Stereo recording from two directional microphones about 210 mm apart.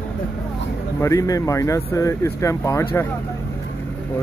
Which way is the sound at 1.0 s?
15° left (ahead or behind).